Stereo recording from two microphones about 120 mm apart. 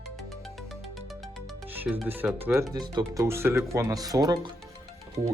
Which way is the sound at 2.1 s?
15° right (ahead or behind).